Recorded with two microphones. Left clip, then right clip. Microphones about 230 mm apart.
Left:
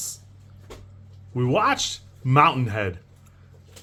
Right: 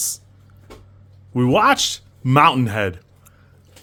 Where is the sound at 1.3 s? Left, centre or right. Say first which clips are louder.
Right 6 dB; right.